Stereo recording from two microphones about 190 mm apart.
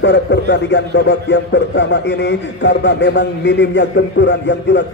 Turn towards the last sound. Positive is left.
turn(degrees=70)  # may be behind; listen again after turning